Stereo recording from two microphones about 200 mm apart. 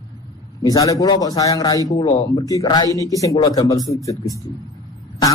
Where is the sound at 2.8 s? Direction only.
20° right (ahead or behind).